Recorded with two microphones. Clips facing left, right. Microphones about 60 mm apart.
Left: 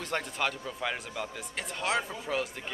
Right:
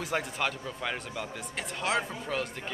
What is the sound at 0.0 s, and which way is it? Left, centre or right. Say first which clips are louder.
A man's voice: right 1 dB; centre.